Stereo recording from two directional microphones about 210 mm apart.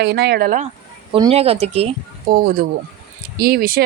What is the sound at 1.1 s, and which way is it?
Speech, 25° right (ahead or behind).